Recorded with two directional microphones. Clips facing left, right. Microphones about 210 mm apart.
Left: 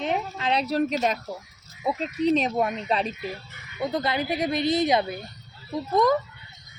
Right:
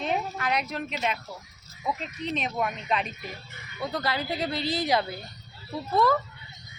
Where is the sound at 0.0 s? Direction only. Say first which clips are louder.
Left 2 dB; 20° left (ahead or behind).